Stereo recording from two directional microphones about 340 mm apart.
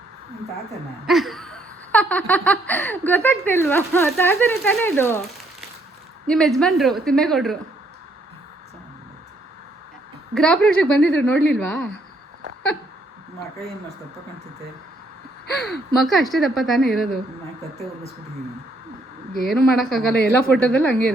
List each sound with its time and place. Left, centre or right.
1.0 s laughter: centre
6.2 s a woman's voice: centre
6.6 s laughter: centre
10.3 s laughter: centre
16.0 s laughter: centre
19.3 s laughter: centre
20.1 s speech: left
20.6 s laughter: centre